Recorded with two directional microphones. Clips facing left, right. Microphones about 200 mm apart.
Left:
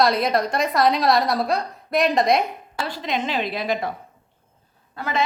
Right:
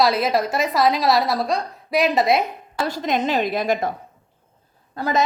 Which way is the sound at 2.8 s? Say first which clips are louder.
Right 4 dB; 45° right (ahead or behind).